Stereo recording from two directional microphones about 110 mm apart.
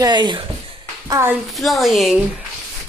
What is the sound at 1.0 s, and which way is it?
Speech, 25° right (ahead or behind).